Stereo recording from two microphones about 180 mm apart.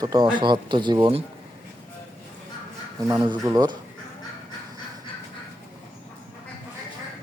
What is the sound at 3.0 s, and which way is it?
Speech, 20° right (ahead or behind).